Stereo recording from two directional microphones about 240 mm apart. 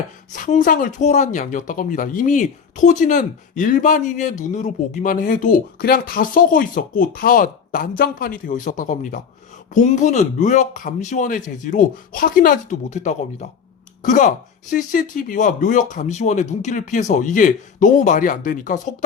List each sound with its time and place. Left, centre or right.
0.3 s speech: left